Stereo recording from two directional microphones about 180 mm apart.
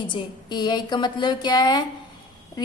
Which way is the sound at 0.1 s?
25° left (ahead or behind).